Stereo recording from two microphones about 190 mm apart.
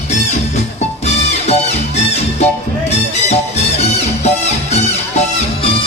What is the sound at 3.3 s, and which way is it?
Music, 35° left (ahead or behind).